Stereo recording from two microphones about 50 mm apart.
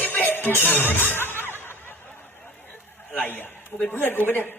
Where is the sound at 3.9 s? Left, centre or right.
Left.